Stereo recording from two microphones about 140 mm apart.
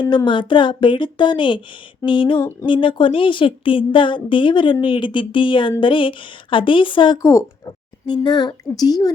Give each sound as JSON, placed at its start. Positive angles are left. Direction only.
{"t": 0.0, "sound": "speech", "side_deg": 35}